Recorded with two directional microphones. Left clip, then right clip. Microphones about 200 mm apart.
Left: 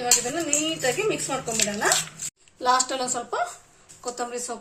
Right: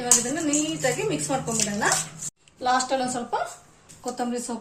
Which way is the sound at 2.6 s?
55° left (ahead or behind).